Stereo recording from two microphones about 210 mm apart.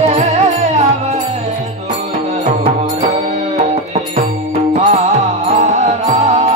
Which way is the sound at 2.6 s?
30° right (ahead or behind).